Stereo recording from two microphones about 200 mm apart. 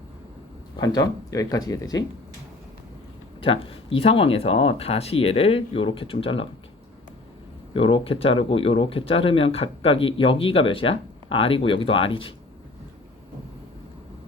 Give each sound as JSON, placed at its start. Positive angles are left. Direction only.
{"t": 0.8, "sound": "speech", "side_deg": 15}
{"t": 3.4, "sound": "speech", "side_deg": 25}
{"t": 7.7, "sound": "speech", "side_deg": 25}